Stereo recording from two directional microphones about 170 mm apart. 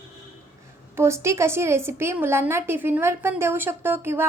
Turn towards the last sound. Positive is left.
turn(degrees=-15)  # may be behind; listen again after turning